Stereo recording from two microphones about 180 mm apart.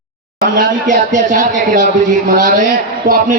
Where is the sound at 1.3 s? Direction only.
45° right (ahead or behind).